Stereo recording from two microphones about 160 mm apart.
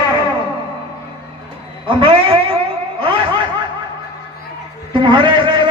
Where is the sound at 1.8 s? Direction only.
35° right (ahead or behind).